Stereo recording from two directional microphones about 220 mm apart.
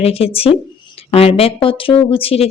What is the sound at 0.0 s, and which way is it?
Speech, 25° left (ahead or behind).